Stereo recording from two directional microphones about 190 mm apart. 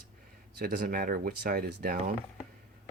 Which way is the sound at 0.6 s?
50° right (ahead or behind).